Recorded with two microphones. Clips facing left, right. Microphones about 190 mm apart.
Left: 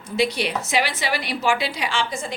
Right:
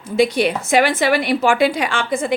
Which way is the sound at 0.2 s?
50° right (ahead or behind).